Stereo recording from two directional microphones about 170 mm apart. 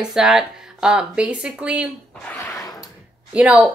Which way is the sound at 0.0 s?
5° right (ahead or behind).